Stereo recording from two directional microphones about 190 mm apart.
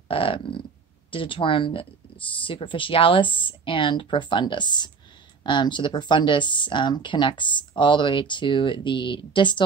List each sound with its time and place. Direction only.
0.1 s dog: 30° left (ahead or behind)
1.1 s speech: 25° left (ahead or behind)